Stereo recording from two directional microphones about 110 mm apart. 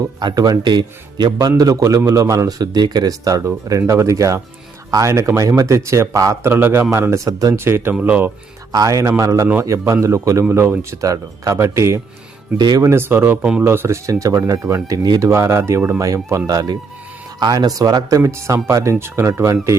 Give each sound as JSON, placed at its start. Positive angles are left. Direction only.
{"t": 0.0, "sound": "a man's voice", "side_deg": -35}
{"t": 8.7, "sound": "speech", "side_deg": -35}
{"t": 12.5, "sound": "a man's voice", "side_deg": -40}
{"t": 12.8, "sound": "speech", "side_deg": -20}
{"t": 13.4, "sound": "speech", "side_deg": -10}
{"t": 13.7, "sound": "a man's voice", "side_deg": -25}